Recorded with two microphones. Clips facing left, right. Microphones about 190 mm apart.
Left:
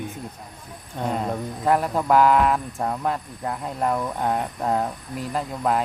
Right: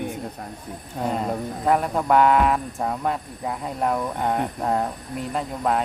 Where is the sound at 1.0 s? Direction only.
Centre (ahead or behind).